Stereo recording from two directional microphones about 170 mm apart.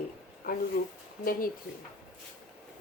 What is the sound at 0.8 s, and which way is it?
Speech, 60° left (ahead or behind).